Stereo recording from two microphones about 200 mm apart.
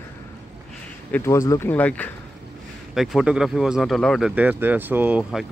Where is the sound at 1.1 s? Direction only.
15° left (ahead or behind).